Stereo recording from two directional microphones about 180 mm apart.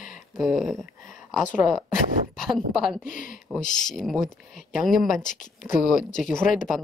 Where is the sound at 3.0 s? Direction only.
50° left (ahead or behind).